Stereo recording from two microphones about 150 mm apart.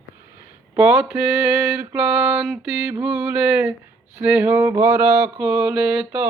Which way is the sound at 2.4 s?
10° right (ahead or behind).